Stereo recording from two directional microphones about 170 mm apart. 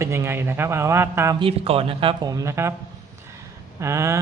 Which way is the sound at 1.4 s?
35° right (ahead or behind).